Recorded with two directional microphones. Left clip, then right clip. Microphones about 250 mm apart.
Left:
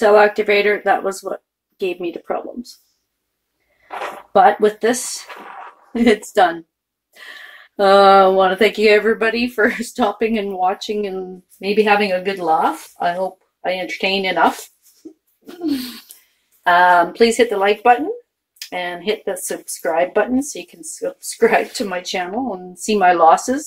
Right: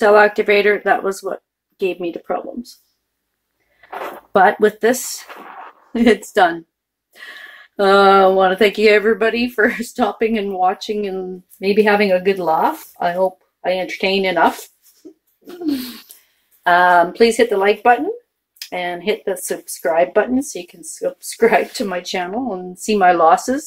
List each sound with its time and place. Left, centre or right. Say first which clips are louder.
0.0 s speech: right 1 dB; centre
4.3 s speech: even; centre
5.9 s speech: right 1 dB; centre
15.6 s a sound: even; right
16.6 s speech: even; centre